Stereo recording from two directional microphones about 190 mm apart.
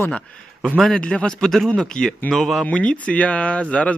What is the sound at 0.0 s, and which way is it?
Speech, 5° left (ahead or behind).